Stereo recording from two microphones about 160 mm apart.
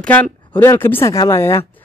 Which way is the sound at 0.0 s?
5° left (ahead or behind).